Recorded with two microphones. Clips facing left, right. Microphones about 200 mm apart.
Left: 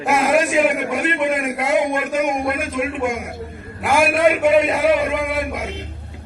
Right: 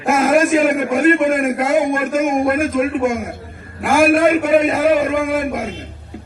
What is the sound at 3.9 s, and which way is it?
A man's voice, 45° right (ahead or behind).